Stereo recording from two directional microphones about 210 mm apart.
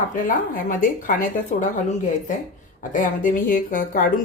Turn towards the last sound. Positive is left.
turn(degrees=40)  # may be behind; listen again after turning